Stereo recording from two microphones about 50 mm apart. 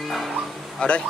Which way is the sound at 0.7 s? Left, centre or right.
Left.